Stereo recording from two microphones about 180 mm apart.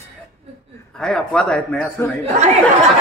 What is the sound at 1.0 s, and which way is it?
Speech, 5° left (ahead or behind).